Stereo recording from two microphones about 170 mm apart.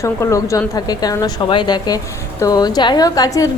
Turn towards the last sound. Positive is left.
turn(degrees=20)  # may be behind; listen again after turning